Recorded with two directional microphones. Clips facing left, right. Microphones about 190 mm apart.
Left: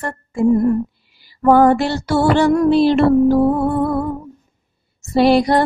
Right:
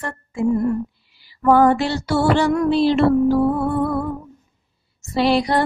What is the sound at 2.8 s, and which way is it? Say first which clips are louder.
Music: left 3 dB; 55° left (ahead or behind).